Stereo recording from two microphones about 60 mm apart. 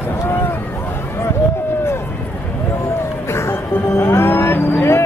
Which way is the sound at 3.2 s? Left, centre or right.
Left.